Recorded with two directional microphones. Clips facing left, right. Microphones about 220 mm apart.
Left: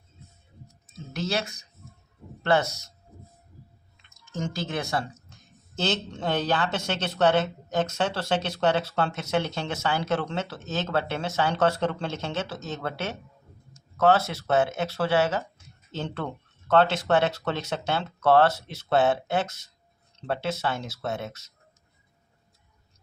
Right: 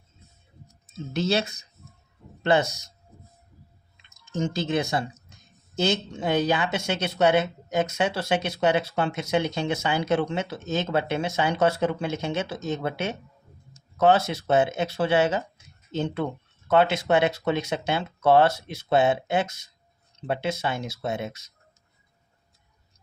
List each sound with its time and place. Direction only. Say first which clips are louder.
1.1 s speech: right 5 dB; 25° right (ahead or behind)
4.3 s speech: right 5 dB; 20° right (ahead or behind)